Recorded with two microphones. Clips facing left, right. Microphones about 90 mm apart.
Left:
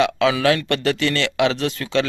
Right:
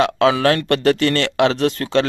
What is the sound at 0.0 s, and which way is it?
Speech, 45° right (ahead or behind).